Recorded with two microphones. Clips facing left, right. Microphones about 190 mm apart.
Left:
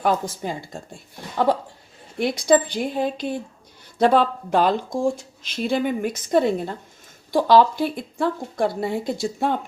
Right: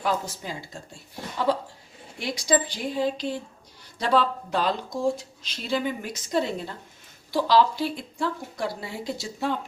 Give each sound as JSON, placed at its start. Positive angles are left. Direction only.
{"t": 0.0, "sound": "a woman's voice", "side_deg": 55}